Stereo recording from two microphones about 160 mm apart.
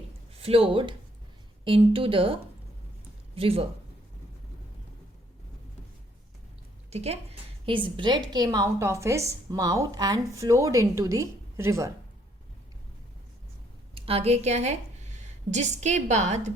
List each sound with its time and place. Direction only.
0.4 s a woman's voice: 35° right (ahead or behind)
6.9 s a woman's voice: 40° right (ahead or behind); by 11.9 s 15° right (ahead or behind)
13.9 s a woman's voice: 35° right (ahead or behind)